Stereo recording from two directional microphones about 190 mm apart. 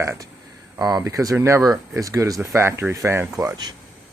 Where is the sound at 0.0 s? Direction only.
15° right (ahead or behind).